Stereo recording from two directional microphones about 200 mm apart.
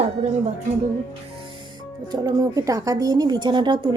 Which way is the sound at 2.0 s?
20° right (ahead or behind).